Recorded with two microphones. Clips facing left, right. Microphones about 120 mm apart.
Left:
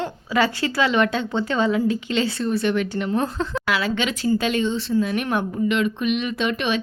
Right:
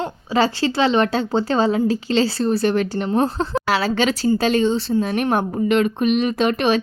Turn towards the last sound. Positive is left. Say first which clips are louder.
# right 5 dB
turn(degrees=-40)  # may be behind; listen again after turning